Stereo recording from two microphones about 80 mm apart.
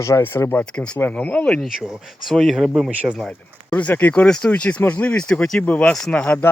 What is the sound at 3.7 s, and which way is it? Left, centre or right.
Speech, centre.